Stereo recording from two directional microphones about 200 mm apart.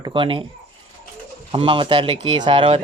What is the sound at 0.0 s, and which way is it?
Speech, 25° right (ahead or behind).